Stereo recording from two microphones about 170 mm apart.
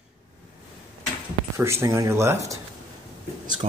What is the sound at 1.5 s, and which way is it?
Speech, 15° right (ahead or behind).